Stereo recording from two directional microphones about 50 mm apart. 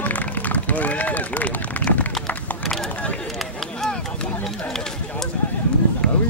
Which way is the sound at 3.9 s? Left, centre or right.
Centre.